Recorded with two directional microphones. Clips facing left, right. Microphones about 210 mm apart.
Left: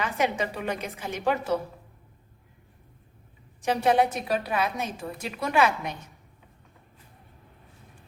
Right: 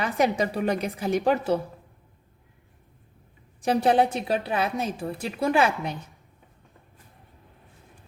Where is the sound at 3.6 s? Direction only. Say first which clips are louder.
Right 2 dB; 35° right (ahead or behind).